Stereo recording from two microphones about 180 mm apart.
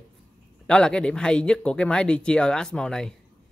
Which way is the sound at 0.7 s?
5° left (ahead or behind).